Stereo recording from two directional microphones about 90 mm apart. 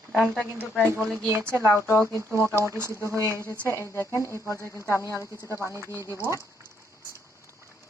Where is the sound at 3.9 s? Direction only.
35° left (ahead or behind).